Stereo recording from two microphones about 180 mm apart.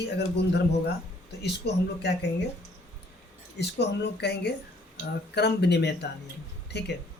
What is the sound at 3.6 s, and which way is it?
Speech, 70° left (ahead or behind).